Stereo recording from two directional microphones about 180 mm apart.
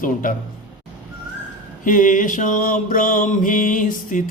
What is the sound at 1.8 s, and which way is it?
A man's voice, 45° left (ahead or behind).